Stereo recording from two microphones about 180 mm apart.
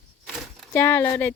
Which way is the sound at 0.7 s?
15° left (ahead or behind).